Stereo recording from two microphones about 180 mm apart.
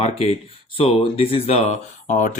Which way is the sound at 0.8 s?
30° left (ahead or behind).